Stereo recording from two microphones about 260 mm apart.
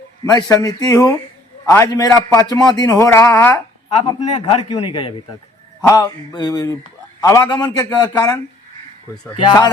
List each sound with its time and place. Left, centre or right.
0.3 s a man's voice: centre
4.3 s a man's voice: left